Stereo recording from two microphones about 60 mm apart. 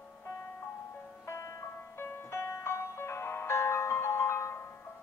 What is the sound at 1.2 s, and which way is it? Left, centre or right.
Music, left.